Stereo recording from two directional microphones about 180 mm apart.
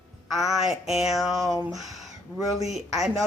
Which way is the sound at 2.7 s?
Centre (ahead or behind).